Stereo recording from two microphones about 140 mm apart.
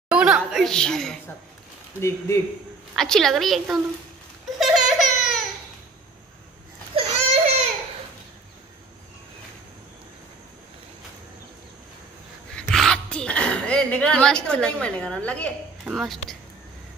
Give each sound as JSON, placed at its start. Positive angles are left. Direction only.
{"t": 0.1, "sound": "a sound", "side_deg": -5}
{"t": 2.0, "sound": "speech", "side_deg": 20}
{"t": 3.0, "sound": "a woman's voice", "side_deg": 0}
{"t": 4.6, "sound": "baby laughter", "side_deg": 0}
{"t": 7.1, "sound": "baby cry", "side_deg": -50}
{"t": 12.5, "sound": "a sound", "side_deg": 5}
{"t": 15.8, "sound": "a woman's voice", "side_deg": 0}